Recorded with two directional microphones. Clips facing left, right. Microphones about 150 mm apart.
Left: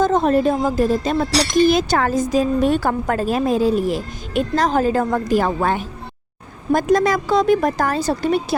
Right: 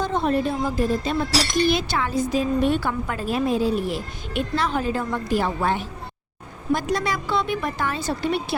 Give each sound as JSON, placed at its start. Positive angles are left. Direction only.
{"t": 0.0, "sound": "a woman's voice", "side_deg": 40}
{"t": 1.3, "sound": "speech", "side_deg": 0}
{"t": 1.6, "sound": "a woman's voice", "side_deg": 40}